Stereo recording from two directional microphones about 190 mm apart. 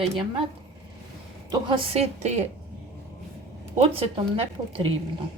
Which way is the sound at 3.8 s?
30° right (ahead or behind).